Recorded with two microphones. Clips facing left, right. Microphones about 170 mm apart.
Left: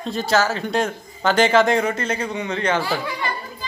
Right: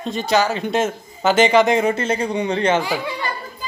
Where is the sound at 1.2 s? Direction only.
Centre (ahead or behind).